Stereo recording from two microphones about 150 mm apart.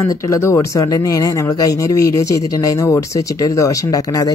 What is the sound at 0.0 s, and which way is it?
Speech, 20° left (ahead or behind).